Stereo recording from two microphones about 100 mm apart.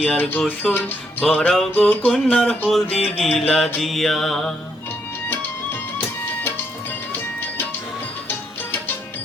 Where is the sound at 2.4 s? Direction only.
10° left (ahead or behind).